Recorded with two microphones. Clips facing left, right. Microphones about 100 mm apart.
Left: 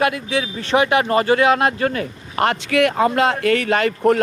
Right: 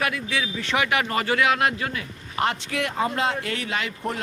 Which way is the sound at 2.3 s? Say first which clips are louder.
Left 7 dB; 65° left (ahead or behind).